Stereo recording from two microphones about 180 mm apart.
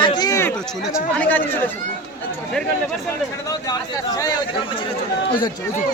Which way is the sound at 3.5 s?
20° left (ahead or behind).